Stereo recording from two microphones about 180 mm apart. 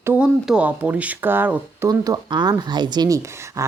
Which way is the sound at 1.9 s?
20° right (ahead or behind).